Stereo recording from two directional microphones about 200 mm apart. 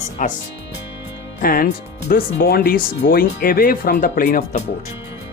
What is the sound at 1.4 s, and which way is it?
Speech, 45° left (ahead or behind).